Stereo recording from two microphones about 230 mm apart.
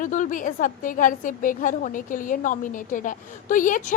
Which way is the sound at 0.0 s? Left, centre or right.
Left.